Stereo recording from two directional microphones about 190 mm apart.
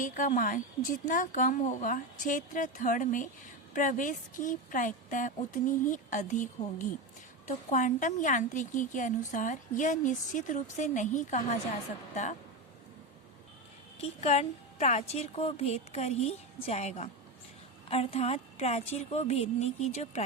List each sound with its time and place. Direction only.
0.0 s a woman's voice: 45° left (ahead or behind)
14.0 s a woman's voice: 35° left (ahead or behind)